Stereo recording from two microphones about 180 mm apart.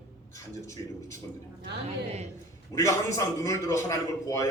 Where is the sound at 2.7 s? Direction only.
15° left (ahead or behind).